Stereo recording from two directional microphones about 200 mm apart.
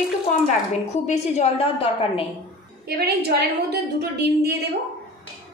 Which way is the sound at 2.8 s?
55° right (ahead or behind).